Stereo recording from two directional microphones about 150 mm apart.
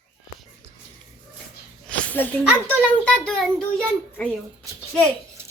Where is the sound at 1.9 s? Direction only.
10° left (ahead or behind).